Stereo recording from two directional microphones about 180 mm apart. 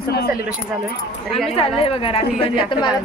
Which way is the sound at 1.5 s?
30° left (ahead or behind).